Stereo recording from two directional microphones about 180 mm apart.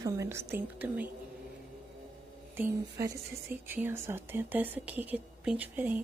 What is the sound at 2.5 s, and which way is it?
A woman's voice, 15° right (ahead or behind).